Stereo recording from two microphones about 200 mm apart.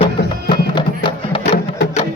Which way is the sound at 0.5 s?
25° left (ahead or behind).